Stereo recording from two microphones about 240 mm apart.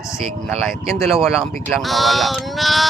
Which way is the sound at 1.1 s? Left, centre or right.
Centre.